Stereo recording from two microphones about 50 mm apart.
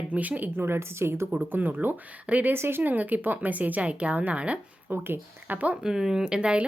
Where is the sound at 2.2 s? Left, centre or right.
Right.